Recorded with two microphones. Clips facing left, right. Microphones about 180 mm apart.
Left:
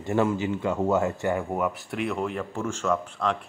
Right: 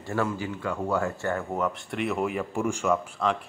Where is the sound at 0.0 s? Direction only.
20° left (ahead or behind).